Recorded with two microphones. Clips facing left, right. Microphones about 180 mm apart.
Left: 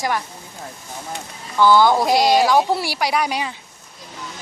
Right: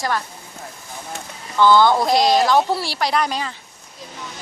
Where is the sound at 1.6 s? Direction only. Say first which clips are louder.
Even; 10° left (ahead or behind).